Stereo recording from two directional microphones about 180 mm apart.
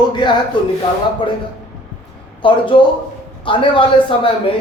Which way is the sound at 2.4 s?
25° left (ahead or behind).